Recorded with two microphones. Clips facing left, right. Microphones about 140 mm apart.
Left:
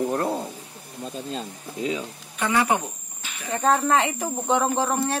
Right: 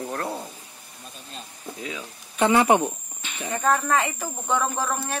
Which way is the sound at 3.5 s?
25° left (ahead or behind).